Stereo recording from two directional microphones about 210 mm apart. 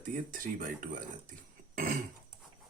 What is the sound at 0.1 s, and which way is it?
Speech, 40° right (ahead or behind).